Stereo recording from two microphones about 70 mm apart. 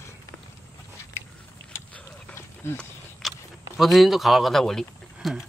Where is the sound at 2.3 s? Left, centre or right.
Left.